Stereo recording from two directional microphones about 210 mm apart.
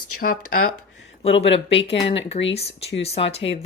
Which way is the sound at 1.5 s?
25° left (ahead or behind).